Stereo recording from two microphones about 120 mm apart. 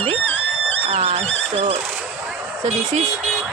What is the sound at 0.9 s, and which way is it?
Speech, 55° right (ahead or behind).